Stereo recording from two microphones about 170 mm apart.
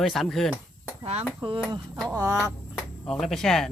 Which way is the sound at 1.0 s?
40° right (ahead or behind).